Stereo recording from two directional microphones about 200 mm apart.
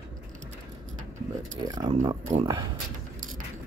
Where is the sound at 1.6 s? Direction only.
20° right (ahead or behind).